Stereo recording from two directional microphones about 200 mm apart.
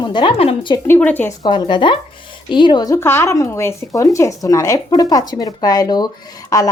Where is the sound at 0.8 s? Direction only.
10° left (ahead or behind).